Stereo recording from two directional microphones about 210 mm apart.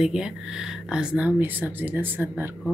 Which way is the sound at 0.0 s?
5° right (ahead or behind).